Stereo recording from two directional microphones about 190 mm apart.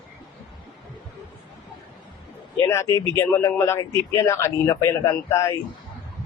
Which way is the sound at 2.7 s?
15° left (ahead or behind).